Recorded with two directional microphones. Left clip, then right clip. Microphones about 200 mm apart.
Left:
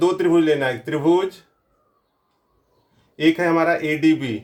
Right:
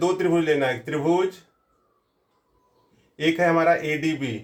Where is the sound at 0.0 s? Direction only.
40° left (ahead or behind).